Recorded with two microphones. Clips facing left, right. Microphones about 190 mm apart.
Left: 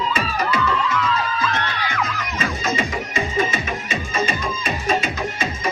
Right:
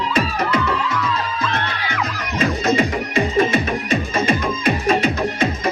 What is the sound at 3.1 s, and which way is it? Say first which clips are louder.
Music: right 6 dB; 60° right (ahead or behind).